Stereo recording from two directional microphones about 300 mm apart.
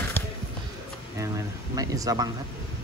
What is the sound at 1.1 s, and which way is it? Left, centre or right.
Speech, centre.